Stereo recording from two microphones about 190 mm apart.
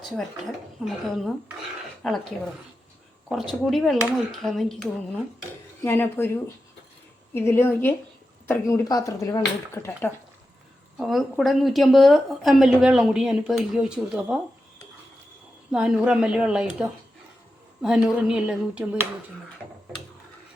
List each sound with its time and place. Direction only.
0.9 s a woman's voice: centre (ahead or behind)
3.5 s a woman's voice: centre (ahead or behind)
7.3 s speech: 10° left (ahead or behind)
10.9 s a woman's voice: centre (ahead or behind)
15.7 s a woman's voice: 5° right (ahead or behind)
17.8 s a woman's voice: 5° right (ahead or behind)